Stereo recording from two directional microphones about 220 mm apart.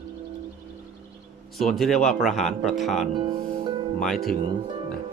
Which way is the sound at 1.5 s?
Centre (ahead or behind).